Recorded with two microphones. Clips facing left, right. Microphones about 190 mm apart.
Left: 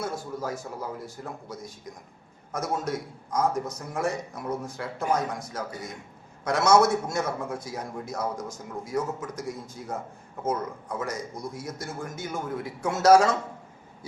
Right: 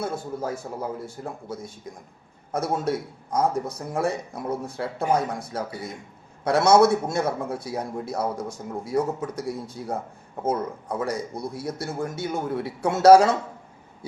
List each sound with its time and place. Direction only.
0.4 s a man's voice: 30° right (ahead or behind)